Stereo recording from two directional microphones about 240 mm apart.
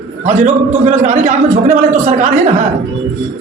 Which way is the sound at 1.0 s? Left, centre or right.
Right.